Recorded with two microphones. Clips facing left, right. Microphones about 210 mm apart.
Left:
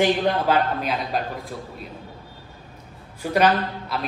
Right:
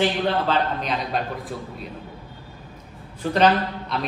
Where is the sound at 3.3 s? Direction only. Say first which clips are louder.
Even; 10° left (ahead or behind).